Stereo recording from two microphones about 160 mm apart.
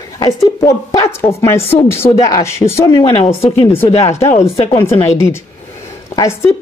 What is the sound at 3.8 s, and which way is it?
Speech, 45° left (ahead or behind).